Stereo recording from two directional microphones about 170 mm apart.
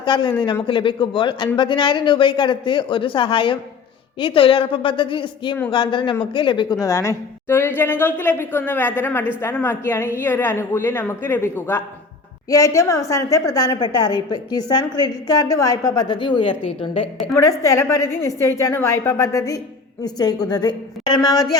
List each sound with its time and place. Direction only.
0.0 s a woman's voice: 25° left (ahead or behind)
17.3 s a woman's voice: 20° left (ahead or behind)